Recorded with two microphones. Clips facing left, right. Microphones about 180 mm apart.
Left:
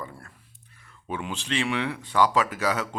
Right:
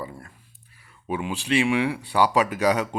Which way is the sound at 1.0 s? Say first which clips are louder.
Right 4 dB; 10° right (ahead or behind).